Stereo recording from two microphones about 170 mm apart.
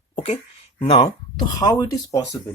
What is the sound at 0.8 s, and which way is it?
Speech, 35° left (ahead or behind).